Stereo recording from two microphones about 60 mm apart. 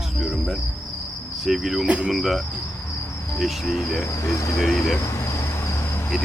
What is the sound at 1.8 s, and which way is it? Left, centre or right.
Cricket, centre.